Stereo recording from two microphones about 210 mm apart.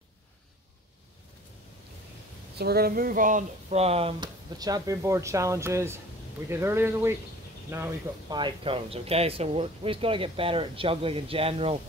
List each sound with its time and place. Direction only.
2.5 s speech: 50° right (ahead or behind); by 8.4 s 10° right (ahead or behind)
8.4 s speech: 25° right (ahead or behind)